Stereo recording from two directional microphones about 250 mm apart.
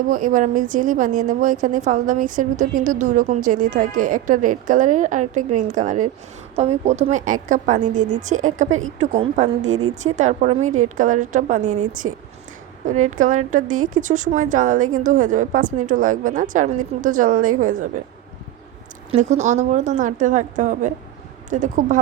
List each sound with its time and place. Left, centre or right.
0.1 s a woman's voice: right
19.1 s a woman's voice: right